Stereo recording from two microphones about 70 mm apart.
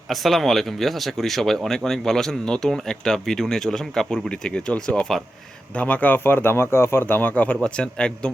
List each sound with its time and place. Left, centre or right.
0.1 s speech: centre